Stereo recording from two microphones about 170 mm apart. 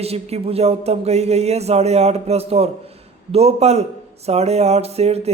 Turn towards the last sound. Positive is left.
turn(degrees=-40)  # may be behind; listen again after turning